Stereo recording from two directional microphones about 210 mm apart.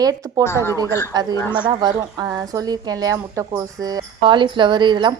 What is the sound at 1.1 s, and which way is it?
A woman's voice, 20° right (ahead or behind).